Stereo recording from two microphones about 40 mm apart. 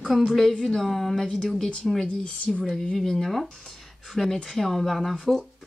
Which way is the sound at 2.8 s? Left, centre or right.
Centre.